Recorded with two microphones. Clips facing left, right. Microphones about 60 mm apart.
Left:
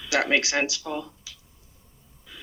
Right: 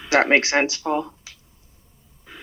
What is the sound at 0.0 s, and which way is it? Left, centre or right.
Speech, right.